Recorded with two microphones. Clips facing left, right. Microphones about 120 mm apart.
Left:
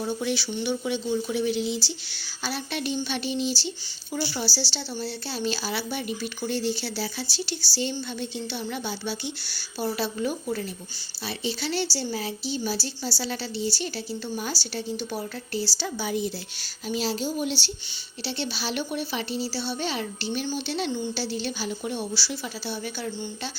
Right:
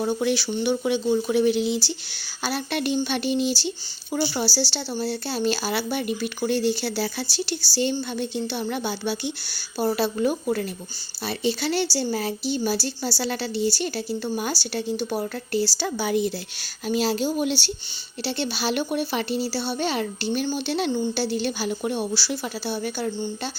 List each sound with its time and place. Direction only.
0.0 s speech: 60° right (ahead or behind)
18.2 s speech: 50° right (ahead or behind)